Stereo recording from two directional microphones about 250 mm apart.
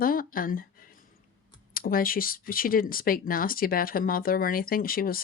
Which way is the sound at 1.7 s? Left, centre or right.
Left.